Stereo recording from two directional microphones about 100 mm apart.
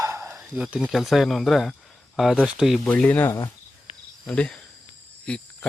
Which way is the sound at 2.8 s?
15° left (ahead or behind).